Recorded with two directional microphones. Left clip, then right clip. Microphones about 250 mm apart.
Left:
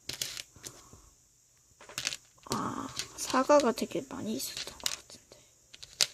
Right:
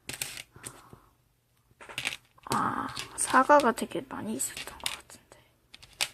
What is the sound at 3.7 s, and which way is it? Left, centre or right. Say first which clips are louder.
Speech: right 1 dB; left.